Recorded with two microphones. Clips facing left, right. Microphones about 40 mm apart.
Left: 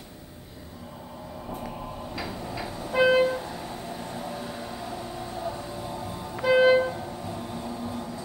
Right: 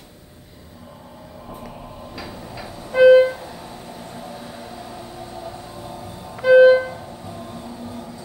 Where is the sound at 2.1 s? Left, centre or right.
Centre.